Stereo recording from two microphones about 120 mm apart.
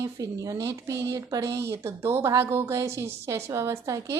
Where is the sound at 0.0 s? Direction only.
25° right (ahead or behind).